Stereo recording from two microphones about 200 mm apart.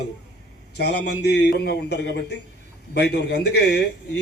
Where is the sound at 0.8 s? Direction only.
55° left (ahead or behind).